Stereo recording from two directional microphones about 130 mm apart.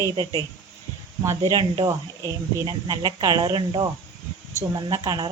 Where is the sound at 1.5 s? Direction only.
30° right (ahead or behind).